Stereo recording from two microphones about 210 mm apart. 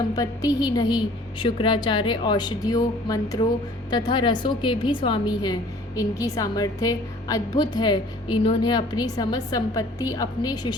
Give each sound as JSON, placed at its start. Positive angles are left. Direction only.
{"t": 0.2, "sound": "a woman's voice", "side_deg": 15}